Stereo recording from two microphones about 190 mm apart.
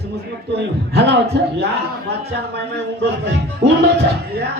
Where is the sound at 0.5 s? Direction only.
60° right (ahead or behind).